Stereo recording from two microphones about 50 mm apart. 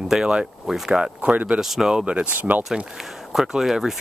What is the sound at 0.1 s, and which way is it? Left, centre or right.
Speech, centre.